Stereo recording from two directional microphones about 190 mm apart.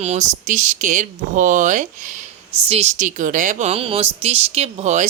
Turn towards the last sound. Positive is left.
turn(degrees=-40)  # may be behind; listen again after turning